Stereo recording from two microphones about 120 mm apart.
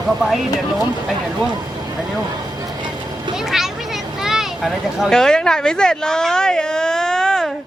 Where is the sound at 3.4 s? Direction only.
5° right (ahead or behind).